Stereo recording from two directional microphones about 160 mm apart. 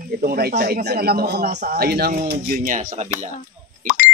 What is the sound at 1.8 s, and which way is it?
Speech, 80° right.